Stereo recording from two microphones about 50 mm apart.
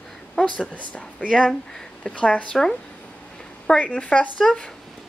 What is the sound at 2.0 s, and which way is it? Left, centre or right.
A woman's voice, left.